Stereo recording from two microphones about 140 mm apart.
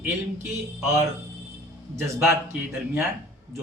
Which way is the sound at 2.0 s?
15° right (ahead or behind).